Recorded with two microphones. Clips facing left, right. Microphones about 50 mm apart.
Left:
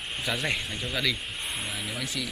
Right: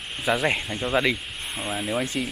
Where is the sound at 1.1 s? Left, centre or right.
Centre.